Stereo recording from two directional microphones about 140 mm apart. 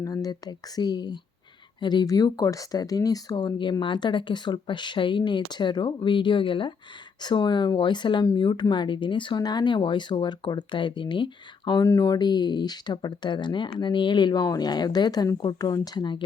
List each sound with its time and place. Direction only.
0.0 s speech: 25° left (ahead or behind)